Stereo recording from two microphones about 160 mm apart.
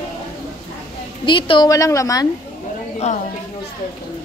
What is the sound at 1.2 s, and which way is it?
A woman's voice, 30° left (ahead or behind).